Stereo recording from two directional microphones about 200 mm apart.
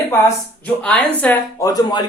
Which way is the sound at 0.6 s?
5° left (ahead or behind).